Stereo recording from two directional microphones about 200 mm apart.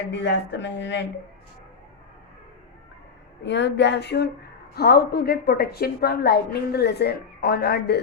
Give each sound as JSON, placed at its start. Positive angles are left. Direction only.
{"t": 0.1, "sound": "speech", "side_deg": 60}
{"t": 3.4, "sound": "a woman's voice", "side_deg": 60}